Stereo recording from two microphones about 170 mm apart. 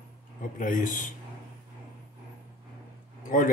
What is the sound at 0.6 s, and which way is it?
Speech, 50° left (ahead or behind).